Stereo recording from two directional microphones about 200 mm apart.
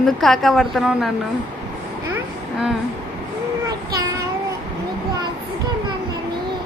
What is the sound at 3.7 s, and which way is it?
Child singing, 15° right (ahead or behind).